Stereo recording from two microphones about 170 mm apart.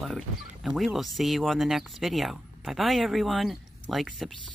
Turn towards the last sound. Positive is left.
turn(degrees=0)  # may be behind; listen again after turning